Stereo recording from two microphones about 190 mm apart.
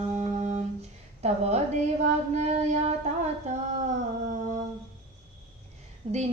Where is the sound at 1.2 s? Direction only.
35° right (ahead or behind).